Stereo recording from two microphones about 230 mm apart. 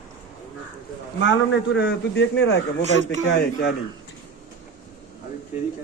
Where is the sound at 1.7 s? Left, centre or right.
Left.